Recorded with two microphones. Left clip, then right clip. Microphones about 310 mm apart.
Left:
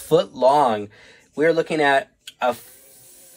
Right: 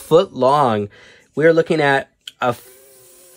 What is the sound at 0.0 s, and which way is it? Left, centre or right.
Speech, centre.